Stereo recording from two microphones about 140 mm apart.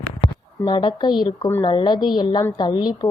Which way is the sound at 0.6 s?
35° left (ahead or behind).